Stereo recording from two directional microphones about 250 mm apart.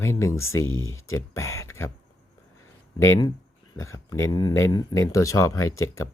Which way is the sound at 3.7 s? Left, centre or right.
Centre.